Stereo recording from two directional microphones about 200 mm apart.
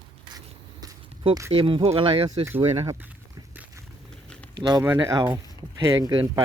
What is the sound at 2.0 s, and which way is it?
Speech, 25° right (ahead or behind).